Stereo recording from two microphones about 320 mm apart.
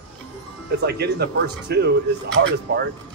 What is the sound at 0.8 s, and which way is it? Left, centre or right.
Speech, right.